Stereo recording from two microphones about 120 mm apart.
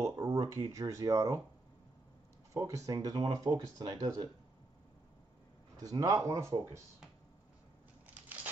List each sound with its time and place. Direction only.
0.1 s a sound: 30° right (ahead or behind)
0.7 s speech: 30° right (ahead or behind)
2.5 s speech: 25° right (ahead or behind)
5.8 s speech: 30° right (ahead or behind)